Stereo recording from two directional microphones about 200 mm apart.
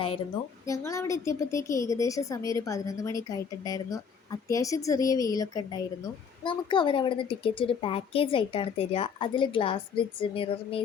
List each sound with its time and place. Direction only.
0.6 s a woman's voice: 15° left (ahead or behind)